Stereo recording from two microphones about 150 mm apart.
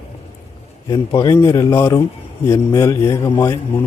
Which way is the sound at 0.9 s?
25° left (ahead or behind).